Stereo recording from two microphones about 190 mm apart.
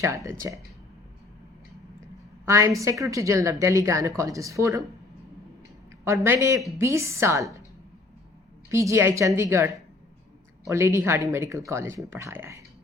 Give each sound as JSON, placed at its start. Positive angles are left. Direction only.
{"t": 0.3, "sound": "a woman's voice", "side_deg": -15}
{"t": 2.5, "sound": "a woman's voice", "side_deg": -15}
{"t": 6.2, "sound": "a woman's voice", "side_deg": -15}
{"t": 8.7, "sound": "a woman's voice", "side_deg": -15}